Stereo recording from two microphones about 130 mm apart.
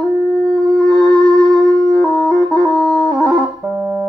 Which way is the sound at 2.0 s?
20° left (ahead or behind).